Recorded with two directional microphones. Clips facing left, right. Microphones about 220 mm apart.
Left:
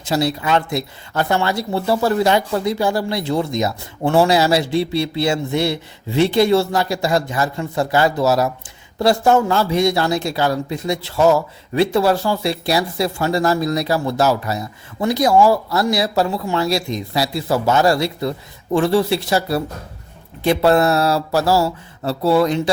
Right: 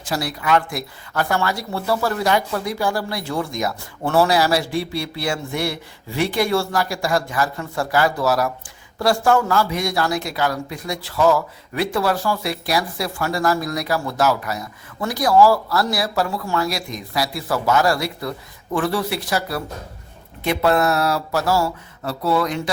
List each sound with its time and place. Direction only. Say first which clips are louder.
0.0 s a man's voice: left 6 dB; 25° left (ahead or behind)